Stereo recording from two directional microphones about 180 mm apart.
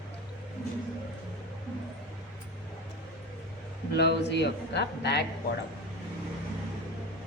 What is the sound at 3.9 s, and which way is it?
A man's voice, 70° left (ahead or behind).